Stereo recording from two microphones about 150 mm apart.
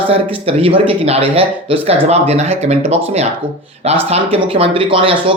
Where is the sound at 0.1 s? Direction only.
40° right (ahead or behind).